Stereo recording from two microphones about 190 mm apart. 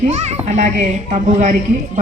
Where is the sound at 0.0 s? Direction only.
35° right (ahead or behind).